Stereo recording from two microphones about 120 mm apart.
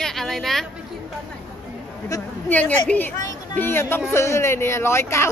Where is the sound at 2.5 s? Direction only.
15° left (ahead or behind).